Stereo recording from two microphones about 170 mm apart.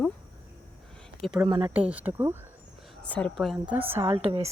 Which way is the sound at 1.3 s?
25° right (ahead or behind).